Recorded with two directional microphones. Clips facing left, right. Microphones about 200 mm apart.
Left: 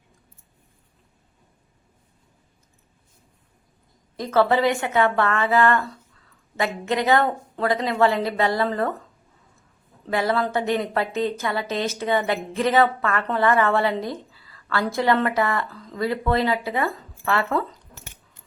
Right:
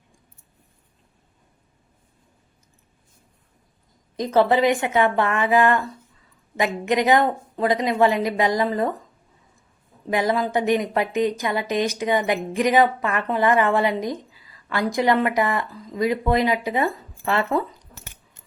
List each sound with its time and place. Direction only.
4.2 s a woman's voice: 20° right (ahead or behind)
10.1 s a woman's voice: 15° right (ahead or behind)